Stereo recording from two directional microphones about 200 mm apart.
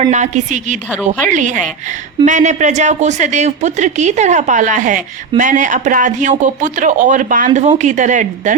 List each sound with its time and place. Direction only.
0.0 s speech: 35° right (ahead or behind)
0.9 s a woman's voice: 5° right (ahead or behind)
1.3 s speech: 40° right (ahead or behind)